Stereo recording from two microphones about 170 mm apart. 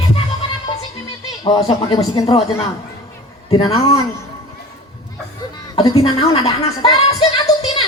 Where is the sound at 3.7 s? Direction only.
20° left (ahead or behind).